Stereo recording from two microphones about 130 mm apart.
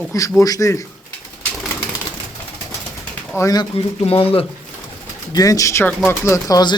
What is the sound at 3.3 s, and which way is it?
Speech, 25° left (ahead or behind).